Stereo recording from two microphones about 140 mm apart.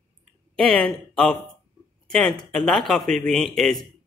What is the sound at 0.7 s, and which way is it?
Speech, 5° left (ahead or behind).